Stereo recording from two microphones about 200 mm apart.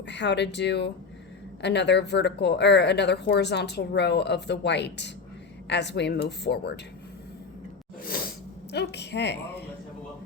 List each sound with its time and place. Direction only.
0.1 s speech: 60° left (ahead or behind)
8.0 s sneeze: 50° left (ahead or behind)
8.7 s speech: 55° left (ahead or behind)